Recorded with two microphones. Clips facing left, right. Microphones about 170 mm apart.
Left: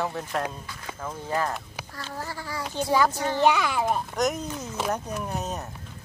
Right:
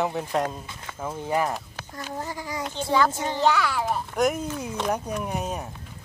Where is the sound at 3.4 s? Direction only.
15° left (ahead or behind).